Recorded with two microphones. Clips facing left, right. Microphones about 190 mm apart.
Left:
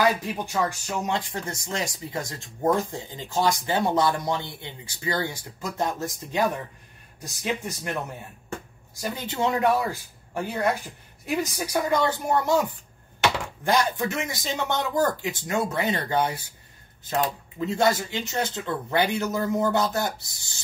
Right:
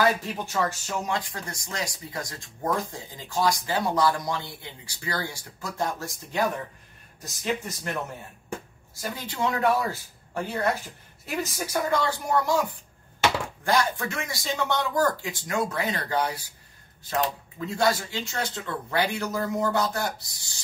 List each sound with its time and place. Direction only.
0.2 s speech: 15° left (ahead or behind)
9.1 s speech: 20° left (ahead or behind)
13.7 s speech: 20° left (ahead or behind)
17.6 s speech: 20° left (ahead or behind)